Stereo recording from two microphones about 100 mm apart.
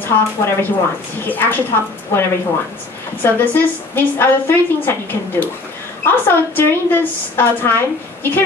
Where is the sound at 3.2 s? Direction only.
20° left (ahead or behind).